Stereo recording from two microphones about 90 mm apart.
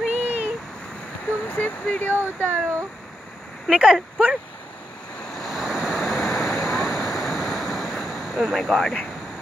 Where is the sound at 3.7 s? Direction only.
10° right (ahead or behind).